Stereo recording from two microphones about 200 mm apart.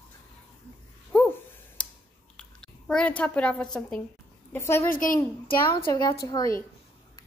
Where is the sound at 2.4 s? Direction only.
5° left (ahead or behind).